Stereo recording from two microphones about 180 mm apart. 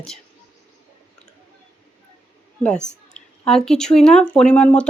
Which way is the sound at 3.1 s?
5° left (ahead or behind).